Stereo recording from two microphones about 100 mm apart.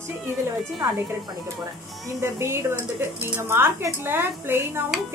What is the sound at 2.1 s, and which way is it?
Speech, 25° right (ahead or behind).